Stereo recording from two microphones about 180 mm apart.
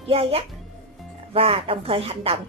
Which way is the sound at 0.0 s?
30° right (ahead or behind).